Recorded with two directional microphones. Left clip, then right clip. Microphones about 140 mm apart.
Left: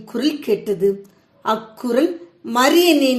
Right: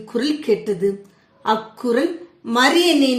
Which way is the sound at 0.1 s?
45° left (ahead or behind).